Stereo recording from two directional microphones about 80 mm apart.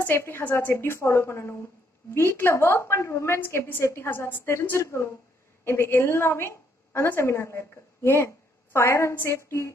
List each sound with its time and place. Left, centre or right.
0.0 s a woman's voice: left